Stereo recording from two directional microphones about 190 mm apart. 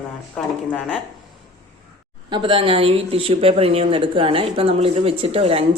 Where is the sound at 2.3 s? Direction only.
25° right (ahead or behind).